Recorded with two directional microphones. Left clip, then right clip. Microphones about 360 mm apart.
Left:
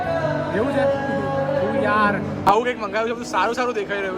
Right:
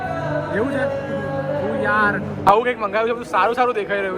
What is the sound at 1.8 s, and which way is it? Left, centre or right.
A man's voice, centre.